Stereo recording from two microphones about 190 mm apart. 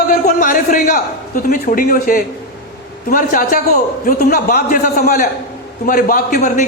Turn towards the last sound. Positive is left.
turn(degrees=40)  # may be behind; listen again after turning